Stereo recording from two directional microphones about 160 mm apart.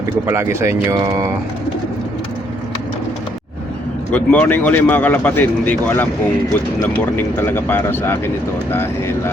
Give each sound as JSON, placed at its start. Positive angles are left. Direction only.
{"t": 0.0, "sound": "speech", "side_deg": -15}
{"t": 4.1, "sound": "speech", "side_deg": 10}